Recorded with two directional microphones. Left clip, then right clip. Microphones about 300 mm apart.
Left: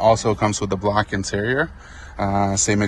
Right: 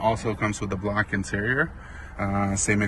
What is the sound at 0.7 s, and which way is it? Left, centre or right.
Speech, centre.